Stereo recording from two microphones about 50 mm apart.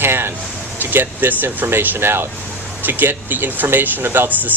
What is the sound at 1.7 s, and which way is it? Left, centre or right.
Speech, right.